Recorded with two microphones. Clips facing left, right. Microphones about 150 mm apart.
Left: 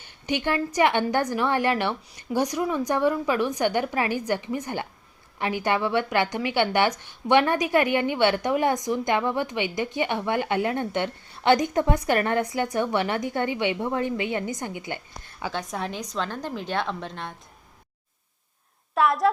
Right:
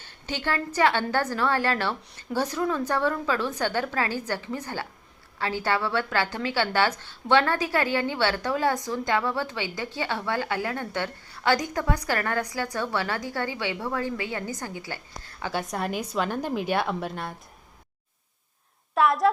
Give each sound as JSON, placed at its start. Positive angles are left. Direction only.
{"t": 0.0, "sound": "a woman's voice", "side_deg": 15}
{"t": 15.5, "sound": "a woman's voice", "side_deg": -5}
{"t": 18.9, "sound": "a woman's voice", "side_deg": 0}